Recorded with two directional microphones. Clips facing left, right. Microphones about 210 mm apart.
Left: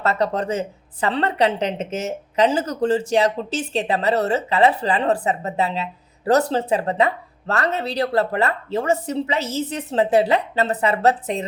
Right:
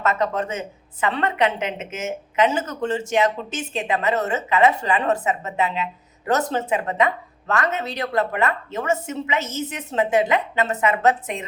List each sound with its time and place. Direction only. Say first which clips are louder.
0.0 s speech: left 1 dB; 35° left (ahead or behind)